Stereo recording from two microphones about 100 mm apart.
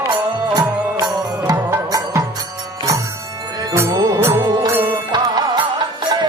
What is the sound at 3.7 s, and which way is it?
Music, 30° right (ahead or behind).